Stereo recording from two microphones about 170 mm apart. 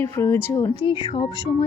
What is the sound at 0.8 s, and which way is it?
Speech, 30° left (ahead or behind).